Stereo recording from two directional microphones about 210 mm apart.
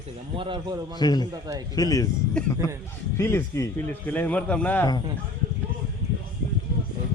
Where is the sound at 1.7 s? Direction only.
15° left (ahead or behind).